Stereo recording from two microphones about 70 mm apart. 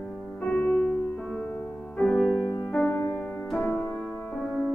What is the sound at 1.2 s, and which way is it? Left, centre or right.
Music, centre.